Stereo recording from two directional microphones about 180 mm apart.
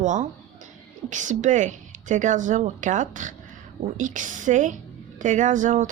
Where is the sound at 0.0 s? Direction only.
45° right (ahead or behind).